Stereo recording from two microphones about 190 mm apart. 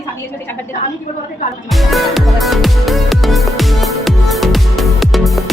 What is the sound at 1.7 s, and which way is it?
Music, centre (ahead or behind).